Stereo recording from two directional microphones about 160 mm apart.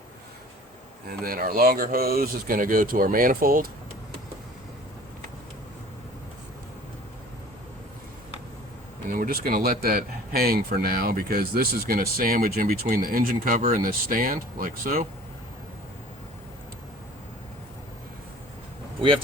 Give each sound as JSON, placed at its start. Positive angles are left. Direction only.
{"t": 1.0, "sound": "speech", "side_deg": -65}
{"t": 9.0, "sound": "speech", "side_deg": -60}